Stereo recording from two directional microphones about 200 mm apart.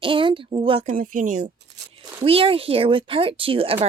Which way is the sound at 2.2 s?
30° right (ahead or behind).